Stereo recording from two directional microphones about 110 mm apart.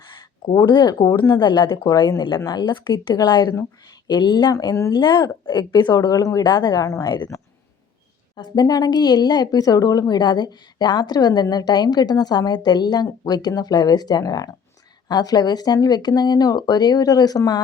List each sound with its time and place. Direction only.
0.1 s speech: 40° left (ahead or behind)
4.5 s speech: 30° left (ahead or behind)
4.9 s speech: 45° left (ahead or behind)
8.4 s speech: 35° left (ahead or behind)